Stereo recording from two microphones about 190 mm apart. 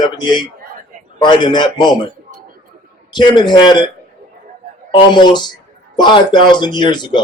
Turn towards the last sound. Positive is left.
turn(degrees=25)  # may be behind; listen again after turning